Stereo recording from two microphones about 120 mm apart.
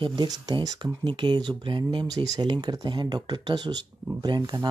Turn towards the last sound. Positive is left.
turn(degrees=-35)  # may be behind; listen again after turning